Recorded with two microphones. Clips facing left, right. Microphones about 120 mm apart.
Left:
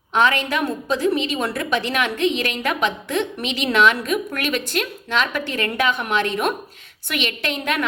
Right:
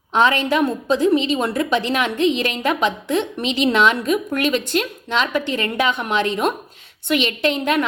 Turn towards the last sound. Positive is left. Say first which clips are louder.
# right 5 dB
turn(degrees=-30)  # may be behind; listen again after turning